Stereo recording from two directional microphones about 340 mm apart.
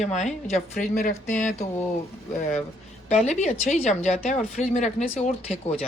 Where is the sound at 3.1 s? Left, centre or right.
Centre.